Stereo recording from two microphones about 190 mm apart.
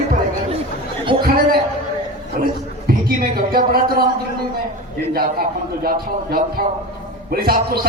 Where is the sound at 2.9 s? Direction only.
50° right (ahead or behind).